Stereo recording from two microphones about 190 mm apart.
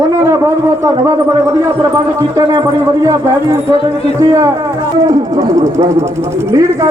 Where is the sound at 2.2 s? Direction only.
20° right (ahead or behind).